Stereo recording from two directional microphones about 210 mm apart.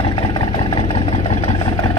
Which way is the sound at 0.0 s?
25° left (ahead or behind).